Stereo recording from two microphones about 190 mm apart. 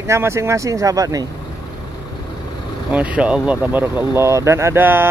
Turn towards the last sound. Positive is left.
turn(degrees=-10)  # may be behind; listen again after turning